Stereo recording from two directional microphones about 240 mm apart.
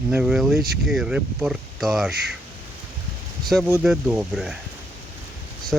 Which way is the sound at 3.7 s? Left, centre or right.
Centre.